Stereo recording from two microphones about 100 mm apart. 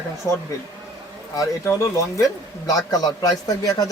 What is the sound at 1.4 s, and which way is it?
Speech, 30° left (ahead or behind).